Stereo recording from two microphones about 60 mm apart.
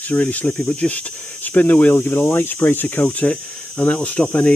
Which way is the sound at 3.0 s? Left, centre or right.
Left.